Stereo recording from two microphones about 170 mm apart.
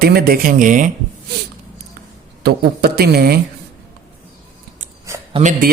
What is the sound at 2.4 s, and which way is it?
Speech, 65° right (ahead or behind).